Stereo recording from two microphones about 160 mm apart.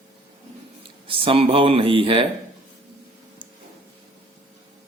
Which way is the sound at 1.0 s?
35° right (ahead or behind).